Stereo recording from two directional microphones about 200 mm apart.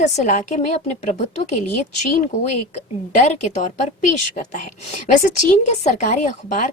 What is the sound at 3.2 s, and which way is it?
A woman's voice, 35° left (ahead or behind).